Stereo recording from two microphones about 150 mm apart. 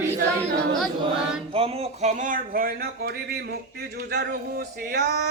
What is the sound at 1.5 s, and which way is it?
Speech, 40° right (ahead or behind).